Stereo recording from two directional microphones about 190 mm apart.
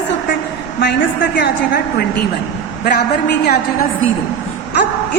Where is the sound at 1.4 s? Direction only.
55° left (ahead or behind).